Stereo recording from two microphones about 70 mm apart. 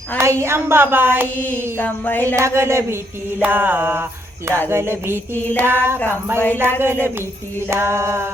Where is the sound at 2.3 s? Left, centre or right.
Right.